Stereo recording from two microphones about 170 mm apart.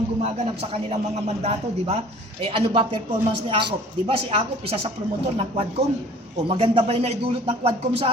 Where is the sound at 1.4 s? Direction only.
40° right (ahead or behind).